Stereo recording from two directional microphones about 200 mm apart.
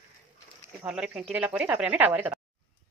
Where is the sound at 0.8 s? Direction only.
5° right (ahead or behind).